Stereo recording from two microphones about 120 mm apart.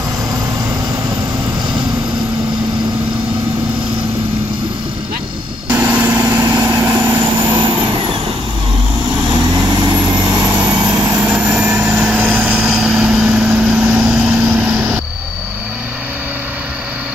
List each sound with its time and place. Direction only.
5.7 s vehicle: 10° right (ahead or behind)
6.2 s vehicle: 25° right (ahead or behind)
7.3 s vehicle: 35° right (ahead or behind)
9.3 s vehicle: 35° right (ahead or behind)
10.5 s vehicle: 15° right (ahead or behind)